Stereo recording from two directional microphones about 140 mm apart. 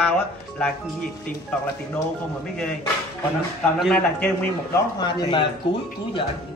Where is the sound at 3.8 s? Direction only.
5° left (ahead or behind).